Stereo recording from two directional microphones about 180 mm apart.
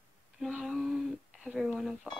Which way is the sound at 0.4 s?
Centre (ahead or behind).